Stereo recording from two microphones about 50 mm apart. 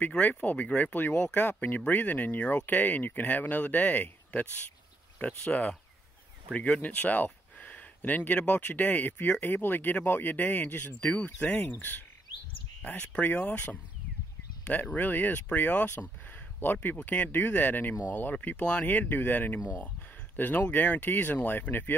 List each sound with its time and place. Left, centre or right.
0.2 s speech: left
12.8 s speech: left
15.0 s speech: left
19.8 s a sound: left
20.7 s speech: left